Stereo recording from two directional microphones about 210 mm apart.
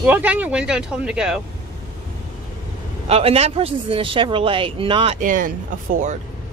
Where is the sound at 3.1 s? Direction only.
30° right (ahead or behind).